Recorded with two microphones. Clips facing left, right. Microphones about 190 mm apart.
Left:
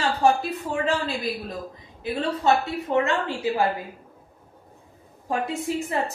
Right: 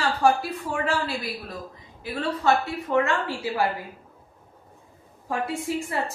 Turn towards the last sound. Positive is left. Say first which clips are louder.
# left 1 dB
turn(degrees=20)  # may be behind; listen again after turning